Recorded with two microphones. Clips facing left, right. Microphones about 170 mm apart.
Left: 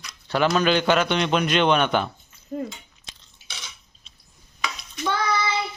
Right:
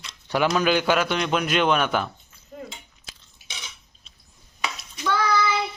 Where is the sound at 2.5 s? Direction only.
40° left (ahead or behind).